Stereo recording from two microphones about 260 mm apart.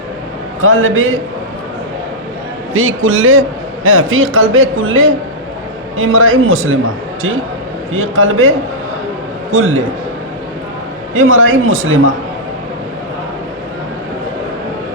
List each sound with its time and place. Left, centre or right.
0.6 s a man's voice: right
2.7 s a man's voice: right
7.9 s a man's voice: right
11.1 s a man's voice: right